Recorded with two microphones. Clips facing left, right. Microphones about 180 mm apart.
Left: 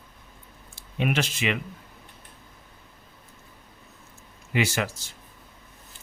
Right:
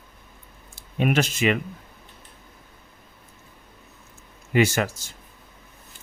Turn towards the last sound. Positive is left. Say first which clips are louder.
# right 5 dB
turn(degrees=-45)  # may be behind; listen again after turning